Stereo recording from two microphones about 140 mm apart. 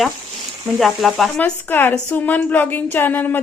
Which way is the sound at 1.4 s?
15° left (ahead or behind).